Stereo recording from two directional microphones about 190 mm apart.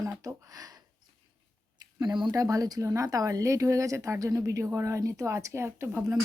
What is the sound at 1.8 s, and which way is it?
A woman's voice, 20° right (ahead or behind).